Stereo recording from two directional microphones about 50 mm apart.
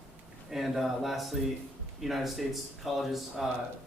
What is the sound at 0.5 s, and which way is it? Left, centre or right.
A man's voice, centre.